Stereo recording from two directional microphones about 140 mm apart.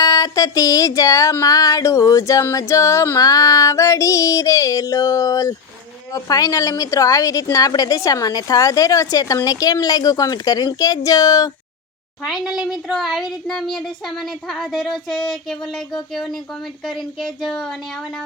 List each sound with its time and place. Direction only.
0.0 s a sound: 25° left (ahead or behind)
12.2 s a child's voice: 5° right (ahead or behind)
16.1 s a child's voice: centre (ahead or behind)